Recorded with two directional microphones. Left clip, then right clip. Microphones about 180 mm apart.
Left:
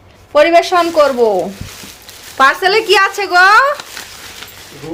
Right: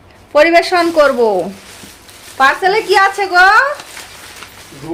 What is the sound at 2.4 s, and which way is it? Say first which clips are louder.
Speech: left 1 dB; 45° left (ahead or behind).